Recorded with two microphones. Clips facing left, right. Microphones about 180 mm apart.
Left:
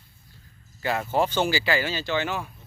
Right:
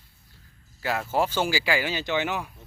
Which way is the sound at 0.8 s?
5° right (ahead or behind).